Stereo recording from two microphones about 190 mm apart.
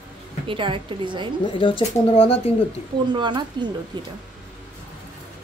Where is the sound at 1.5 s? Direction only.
30° left (ahead or behind).